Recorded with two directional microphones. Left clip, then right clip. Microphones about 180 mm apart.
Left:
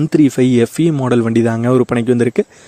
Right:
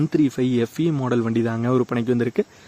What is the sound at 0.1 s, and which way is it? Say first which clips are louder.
Speech: left 8 dB; 45° left (ahead or behind).